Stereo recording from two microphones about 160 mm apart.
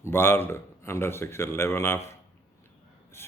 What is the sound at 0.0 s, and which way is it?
Speech, 15° left (ahead or behind).